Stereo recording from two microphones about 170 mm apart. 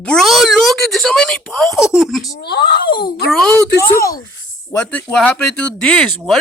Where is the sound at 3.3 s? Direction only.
5° left (ahead or behind).